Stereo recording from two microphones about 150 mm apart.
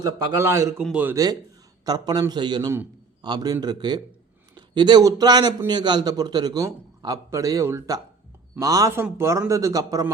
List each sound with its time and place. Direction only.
0.0 s a man's voice: 20° right (ahead or behind)
1.1 s a man's voice: 25° right (ahead or behind)